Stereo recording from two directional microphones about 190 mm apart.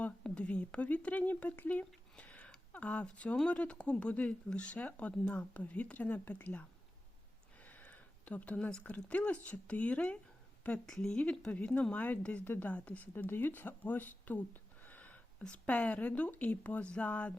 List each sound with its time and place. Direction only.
0.0 s speech: 5° left (ahead or behind)